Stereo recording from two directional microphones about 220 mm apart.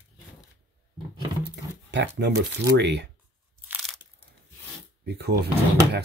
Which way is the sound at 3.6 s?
5° right (ahead or behind).